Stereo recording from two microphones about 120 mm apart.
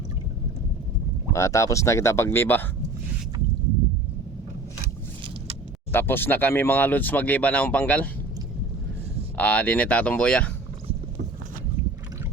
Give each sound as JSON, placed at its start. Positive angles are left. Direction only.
{"t": 1.3, "sound": "speech", "side_deg": 25}
{"t": 5.9, "sound": "speech", "side_deg": 20}
{"t": 9.4, "sound": "speech", "side_deg": 15}